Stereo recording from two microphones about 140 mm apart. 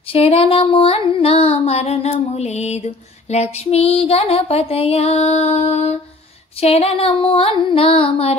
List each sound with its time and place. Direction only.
0.1 s music: 45° left (ahead or behind)